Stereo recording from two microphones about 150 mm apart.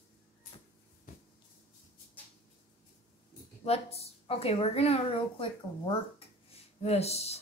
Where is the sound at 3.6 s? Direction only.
45° left (ahead or behind).